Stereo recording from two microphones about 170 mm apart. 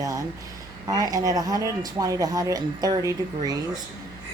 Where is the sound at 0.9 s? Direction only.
20° right (ahead or behind).